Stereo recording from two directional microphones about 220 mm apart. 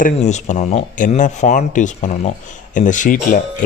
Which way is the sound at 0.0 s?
30° left (ahead or behind).